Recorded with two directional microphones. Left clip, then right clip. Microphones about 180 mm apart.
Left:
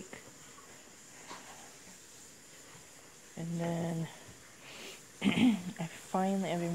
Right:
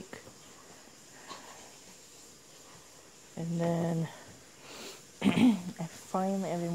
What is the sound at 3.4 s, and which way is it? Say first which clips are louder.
Speech: right 5 dB; 25° right (ahead or behind).